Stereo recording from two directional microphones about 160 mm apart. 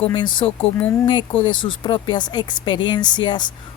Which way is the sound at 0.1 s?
30° left (ahead or behind).